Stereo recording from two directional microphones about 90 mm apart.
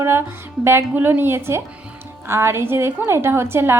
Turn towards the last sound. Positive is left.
turn(degrees=-25)  # may be behind; listen again after turning